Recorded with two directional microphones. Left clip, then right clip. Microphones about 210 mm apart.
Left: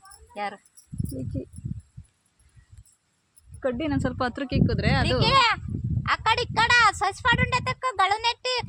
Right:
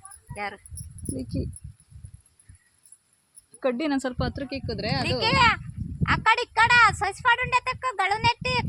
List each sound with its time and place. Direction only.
0.3 s speech: 30° left (ahead or behind)
1.1 s a woman's voice: 15° right (ahead or behind)
3.6 s a woman's voice: 20° right (ahead or behind)
4.2 s speech: 15° left (ahead or behind)
5.2 s a woman's voice: 35° left (ahead or behind)